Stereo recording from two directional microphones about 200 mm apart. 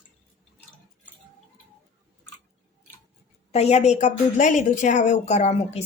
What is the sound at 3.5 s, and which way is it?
A woman's voice, 35° left (ahead or behind).